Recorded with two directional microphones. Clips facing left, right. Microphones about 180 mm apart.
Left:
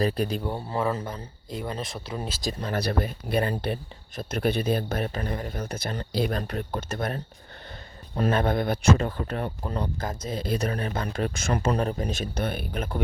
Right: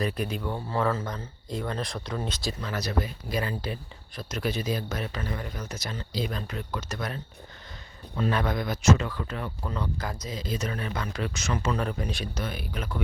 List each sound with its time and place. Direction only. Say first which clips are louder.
0.0 s speech: left 4 dB; 35° left (ahead or behind)
0.5 s speech: even; 15° left (ahead or behind)
2.5 s speech: left 7 dB; 45° left (ahead or behind)
2.8 s speech: left 3 dB; 60° left (ahead or behind)
8.3 s speech: left 5 dB; 50° left (ahead or behind)
9.6 s speech: even; 35° left (ahead or behind)
10.0 s speech: left 4 dB; 50° left (ahead or behind)
10.7 s speech: left 3 dB; 40° left (ahead or behind)
11.8 s speech: left 3 dB; 40° left (ahead or behind); by 12.9 s 55° left (ahead or behind)